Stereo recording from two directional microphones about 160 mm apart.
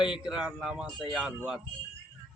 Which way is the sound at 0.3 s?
5° right (ahead or behind).